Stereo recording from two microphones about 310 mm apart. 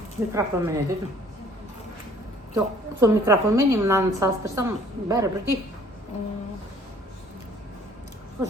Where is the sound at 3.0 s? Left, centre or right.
Centre.